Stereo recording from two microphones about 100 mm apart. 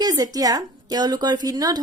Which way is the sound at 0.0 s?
40° right (ahead or behind).